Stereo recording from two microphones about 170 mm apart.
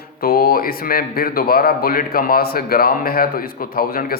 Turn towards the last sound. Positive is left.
turn(degrees=60)  # may be behind; listen again after turning